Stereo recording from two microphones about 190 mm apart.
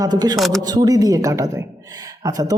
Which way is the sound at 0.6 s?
20° right (ahead or behind).